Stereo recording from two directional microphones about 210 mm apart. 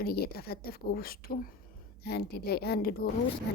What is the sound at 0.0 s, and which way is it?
Speech, 50° left (ahead or behind).